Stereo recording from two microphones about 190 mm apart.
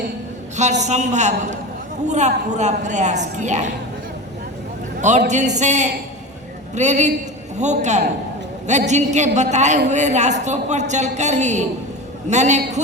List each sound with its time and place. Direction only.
0.5 s a man's voice: 40° right (ahead or behind)
4.9 s a man's voice: 40° right (ahead or behind)